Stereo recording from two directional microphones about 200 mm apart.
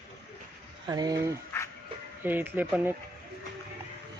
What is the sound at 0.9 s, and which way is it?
Speech, 20° right (ahead or behind).